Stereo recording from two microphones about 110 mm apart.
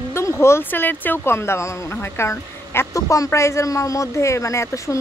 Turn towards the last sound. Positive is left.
turn(degrees=25)  # may be behind; listen again after turning